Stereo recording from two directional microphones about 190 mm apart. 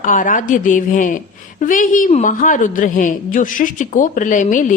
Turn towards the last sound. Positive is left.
turn(degrees=40)  # may be behind; listen again after turning